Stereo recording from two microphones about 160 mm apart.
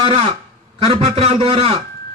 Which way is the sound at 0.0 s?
45° right (ahead or behind).